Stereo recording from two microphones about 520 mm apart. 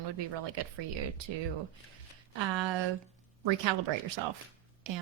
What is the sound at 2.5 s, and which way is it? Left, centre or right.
Speech, right.